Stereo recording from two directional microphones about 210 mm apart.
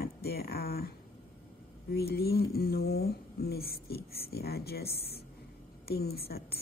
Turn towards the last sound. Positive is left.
turn(degrees=50)  # may be behind; listen again after turning